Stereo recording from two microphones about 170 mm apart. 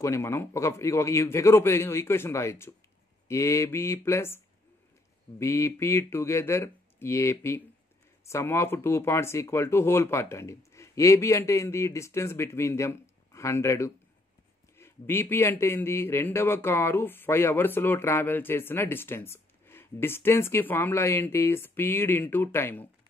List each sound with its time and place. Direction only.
0.0 s a man's voice: 15° left (ahead or behind)
5.4 s a man's voice: 15° left (ahead or behind)